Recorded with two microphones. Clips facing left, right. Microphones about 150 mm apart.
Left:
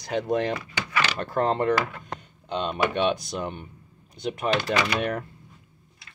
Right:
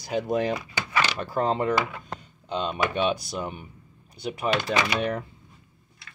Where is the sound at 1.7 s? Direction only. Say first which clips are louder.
Left 1 dB; 15° right (ahead or behind).